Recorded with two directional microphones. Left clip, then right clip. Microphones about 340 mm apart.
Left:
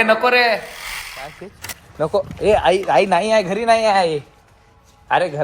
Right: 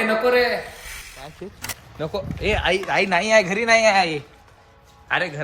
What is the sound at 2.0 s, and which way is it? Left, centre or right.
A man's voice, centre.